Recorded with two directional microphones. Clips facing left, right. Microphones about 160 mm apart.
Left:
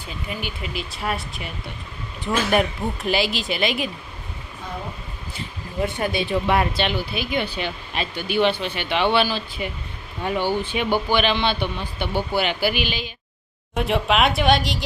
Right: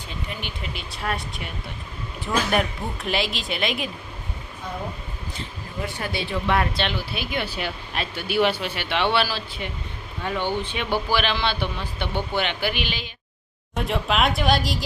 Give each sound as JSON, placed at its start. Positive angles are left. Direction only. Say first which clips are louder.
{"t": 0.4, "sound": "speech", "louder": "left 4 dB", "side_deg": 5}
{"t": 2.5, "sound": "speech", "louder": "left 3 dB", "side_deg": 0}
{"t": 5.8, "sound": "speech", "louder": "left 6 dB", "side_deg": 20}
{"t": 6.7, "sound": "speech", "louder": "left 3 dB", "side_deg": 0}
{"t": 9.6, "sound": "speech", "louder": "left 3 dB", "side_deg": 10}